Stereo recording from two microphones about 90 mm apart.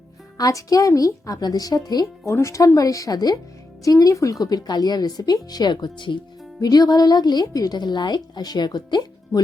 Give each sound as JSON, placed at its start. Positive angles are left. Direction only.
{"t": 0.3, "sound": "a woman's voice", "side_deg": 40}
{"t": 2.3, "sound": "a woman's voice", "side_deg": 35}
{"t": 6.6, "sound": "a woman's voice", "side_deg": 45}